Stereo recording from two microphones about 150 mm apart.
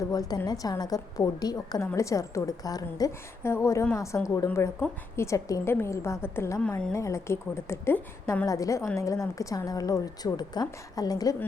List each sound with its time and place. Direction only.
0.0 s a woman's voice: 25° left (ahead or behind); by 6.9 s 5° left (ahead or behind)
6.9 s a woman's voice: 20° left (ahead or behind)